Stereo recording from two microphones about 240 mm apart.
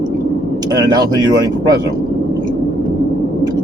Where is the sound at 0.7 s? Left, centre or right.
Centre.